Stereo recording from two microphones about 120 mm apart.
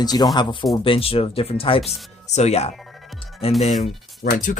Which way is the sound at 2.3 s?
65° left (ahead or behind).